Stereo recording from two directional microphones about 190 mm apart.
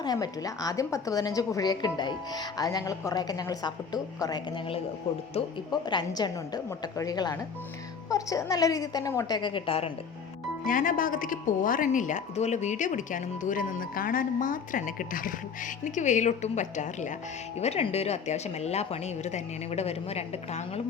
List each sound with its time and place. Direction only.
0.0 s a woman's voice: 20° left (ahead or behind)
5.8 s a woman's voice: 20° left (ahead or behind)
10.7 s a woman's voice: 45° left (ahead or behind)